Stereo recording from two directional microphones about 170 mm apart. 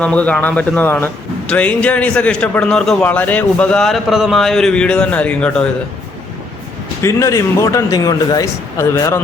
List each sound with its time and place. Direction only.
0.0 s a man's voice: 5° left (ahead or behind)
7.0 s speech: 15° left (ahead or behind)